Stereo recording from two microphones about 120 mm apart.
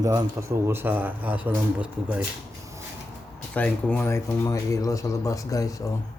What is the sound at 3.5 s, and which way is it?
Speech, 10° left (ahead or behind).